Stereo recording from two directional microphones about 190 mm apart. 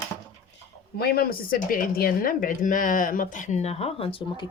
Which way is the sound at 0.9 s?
55° left (ahead or behind).